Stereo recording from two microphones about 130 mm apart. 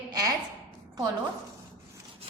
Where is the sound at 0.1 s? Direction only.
30° right (ahead or behind).